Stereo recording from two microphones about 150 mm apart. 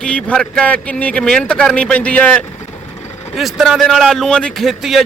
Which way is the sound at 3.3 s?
Centre (ahead or behind).